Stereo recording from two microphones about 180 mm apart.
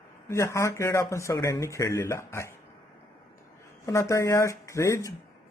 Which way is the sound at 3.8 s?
15° left (ahead or behind).